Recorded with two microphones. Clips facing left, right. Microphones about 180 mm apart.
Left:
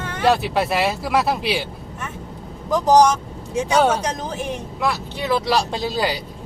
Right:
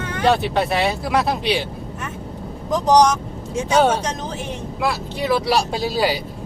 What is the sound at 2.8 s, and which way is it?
Speech, 5° left (ahead or behind).